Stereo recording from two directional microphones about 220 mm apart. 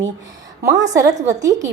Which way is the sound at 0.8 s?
15° right (ahead or behind).